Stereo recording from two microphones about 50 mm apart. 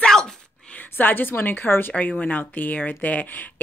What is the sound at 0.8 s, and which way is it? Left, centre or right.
A woman's voice, left.